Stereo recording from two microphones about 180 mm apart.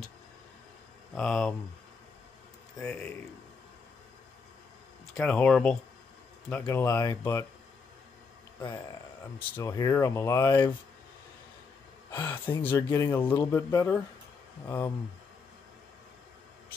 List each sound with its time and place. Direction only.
1.1 s speech: centre (ahead or behind)
2.8 s speech: 10° left (ahead or behind)
5.1 s speech: 5° left (ahead or behind)
9.6 s speech: 20° left (ahead or behind)
12.1 s speech: 10° left (ahead or behind)